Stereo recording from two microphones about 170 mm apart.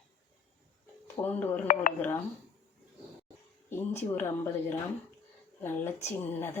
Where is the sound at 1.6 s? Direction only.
50° left (ahead or behind).